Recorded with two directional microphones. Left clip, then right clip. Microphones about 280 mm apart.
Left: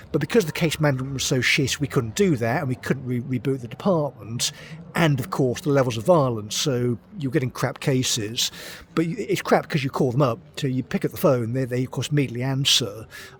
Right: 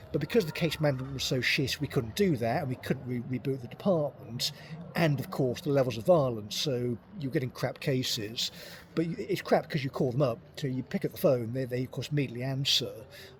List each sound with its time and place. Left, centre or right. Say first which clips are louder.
0.1 s a man's voice: left 7 dB; left